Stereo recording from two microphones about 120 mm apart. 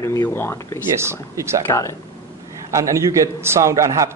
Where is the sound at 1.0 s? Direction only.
25° right (ahead or behind).